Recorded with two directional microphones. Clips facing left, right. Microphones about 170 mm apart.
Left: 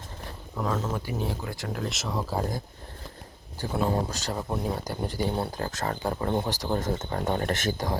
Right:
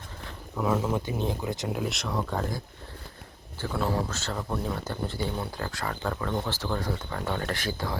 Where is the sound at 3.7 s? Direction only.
20° left (ahead or behind).